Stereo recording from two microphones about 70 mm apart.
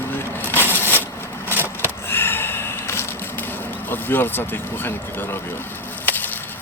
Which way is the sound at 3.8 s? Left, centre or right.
Left.